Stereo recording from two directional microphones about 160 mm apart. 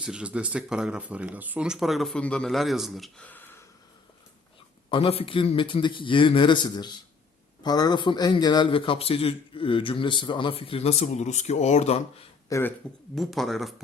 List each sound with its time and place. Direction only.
0.0 s speech: 5° right (ahead or behind); by 3.6 s 10° left (ahead or behind)
4.9 s a man's voice: 35° left (ahead or behind)
12.5 s speech: 15° left (ahead or behind)
13.1 s speech: centre (ahead or behind)